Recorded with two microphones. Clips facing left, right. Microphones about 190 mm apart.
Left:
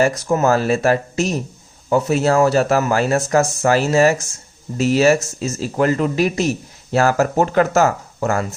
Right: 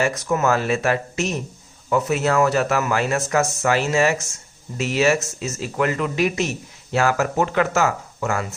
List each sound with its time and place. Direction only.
0.0 s a man's voice: 30° left (ahead or behind)